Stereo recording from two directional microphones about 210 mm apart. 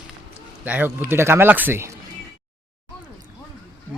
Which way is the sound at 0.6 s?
10° right (ahead or behind).